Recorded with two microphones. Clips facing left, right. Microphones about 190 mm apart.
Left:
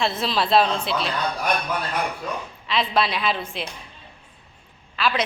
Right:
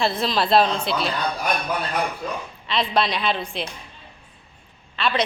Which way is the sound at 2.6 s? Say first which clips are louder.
Even; centre (ahead or behind).